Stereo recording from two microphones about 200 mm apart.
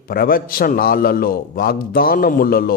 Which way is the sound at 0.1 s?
45° left (ahead or behind).